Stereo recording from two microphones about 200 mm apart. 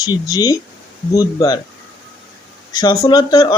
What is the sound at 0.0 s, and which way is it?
Speech, 20° left (ahead or behind).